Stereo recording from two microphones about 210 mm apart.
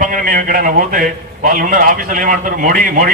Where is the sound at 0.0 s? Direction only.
40° right (ahead or behind).